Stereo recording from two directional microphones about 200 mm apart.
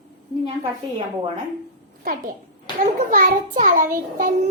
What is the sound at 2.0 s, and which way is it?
A child's voice, 45° right (ahead or behind).